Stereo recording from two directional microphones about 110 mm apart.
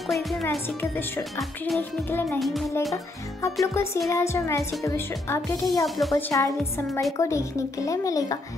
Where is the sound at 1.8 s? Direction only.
20° left (ahead or behind).